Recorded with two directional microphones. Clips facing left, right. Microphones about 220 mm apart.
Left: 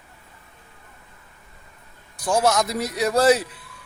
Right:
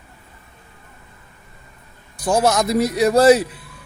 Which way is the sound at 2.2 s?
30° right (ahead or behind).